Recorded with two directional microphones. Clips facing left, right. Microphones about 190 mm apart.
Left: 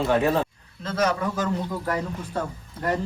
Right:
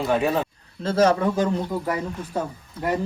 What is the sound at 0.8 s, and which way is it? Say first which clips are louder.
Speech: right 6 dB; 30° right (ahead or behind).